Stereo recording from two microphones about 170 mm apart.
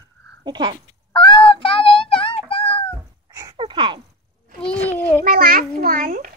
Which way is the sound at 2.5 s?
35° left (ahead or behind).